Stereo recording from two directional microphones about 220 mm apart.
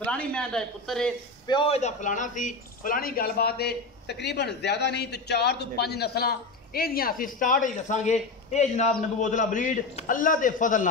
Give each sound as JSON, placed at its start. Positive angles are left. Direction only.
{"t": 0.0, "sound": "a man's voice", "side_deg": 5}
{"t": 1.5, "sound": "a man's voice", "side_deg": 25}